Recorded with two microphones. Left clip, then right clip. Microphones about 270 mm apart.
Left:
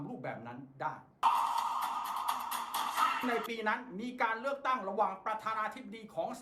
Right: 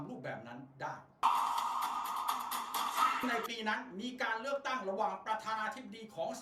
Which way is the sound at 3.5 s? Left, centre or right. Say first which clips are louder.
Left 3 dB; left.